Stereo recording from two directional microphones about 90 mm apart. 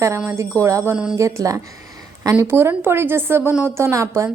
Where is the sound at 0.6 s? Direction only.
35° right (ahead or behind).